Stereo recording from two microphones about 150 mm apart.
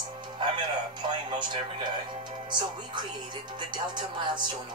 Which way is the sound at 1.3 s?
30° right (ahead or behind).